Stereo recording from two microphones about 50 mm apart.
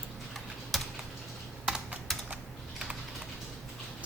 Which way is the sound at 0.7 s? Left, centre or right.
Centre.